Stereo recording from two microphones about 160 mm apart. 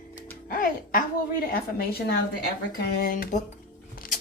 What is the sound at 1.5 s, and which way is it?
Speech, 75° left (ahead or behind).